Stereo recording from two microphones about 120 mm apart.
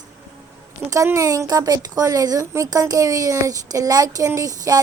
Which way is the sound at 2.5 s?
25° right (ahead or behind).